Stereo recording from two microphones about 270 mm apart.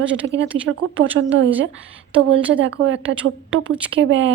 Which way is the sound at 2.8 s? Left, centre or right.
Right.